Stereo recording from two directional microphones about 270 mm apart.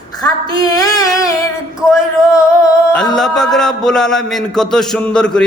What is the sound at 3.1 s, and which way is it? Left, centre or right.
A man's voice, centre.